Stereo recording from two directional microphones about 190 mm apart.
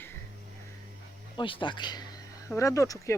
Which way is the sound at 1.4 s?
25° left (ahead or behind).